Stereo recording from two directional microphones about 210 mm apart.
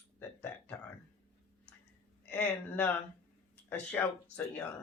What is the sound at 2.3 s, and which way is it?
Speech, 5° left (ahead or behind).